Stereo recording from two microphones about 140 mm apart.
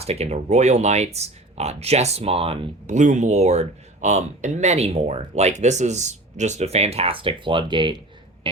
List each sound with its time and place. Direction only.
0.0 s speech: 50° right (ahead or behind); by 8.0 s 35° right (ahead or behind)